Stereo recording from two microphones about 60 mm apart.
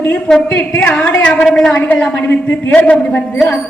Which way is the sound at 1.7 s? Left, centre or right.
Left.